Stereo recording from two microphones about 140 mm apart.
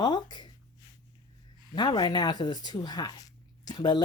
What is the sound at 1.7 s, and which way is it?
Speech, 30° left (ahead or behind).